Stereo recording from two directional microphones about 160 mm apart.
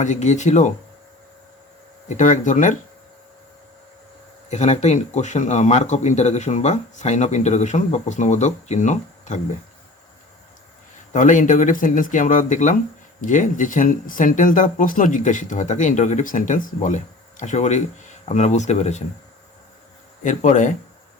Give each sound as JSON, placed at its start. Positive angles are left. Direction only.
{"t": 0.0, "sound": "speech", "side_deg": 50}
{"t": 2.0, "sound": "speech", "side_deg": 50}
{"t": 4.4, "sound": "speech", "side_deg": 45}
{"t": 11.1, "sound": "speech", "side_deg": 50}
{"t": 20.2, "sound": "speech", "side_deg": 50}